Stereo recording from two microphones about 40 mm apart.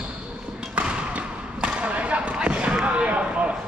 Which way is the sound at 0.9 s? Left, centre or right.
Right.